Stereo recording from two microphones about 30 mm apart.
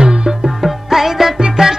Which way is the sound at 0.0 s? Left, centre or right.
Right.